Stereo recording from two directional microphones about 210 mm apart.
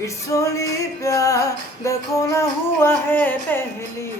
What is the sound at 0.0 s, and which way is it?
Music, 15° left (ahead or behind).